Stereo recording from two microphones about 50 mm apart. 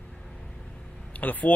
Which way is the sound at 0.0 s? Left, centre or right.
Centre.